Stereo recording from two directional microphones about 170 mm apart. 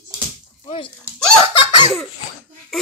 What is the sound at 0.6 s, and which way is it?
Speech, 35° left (ahead or behind).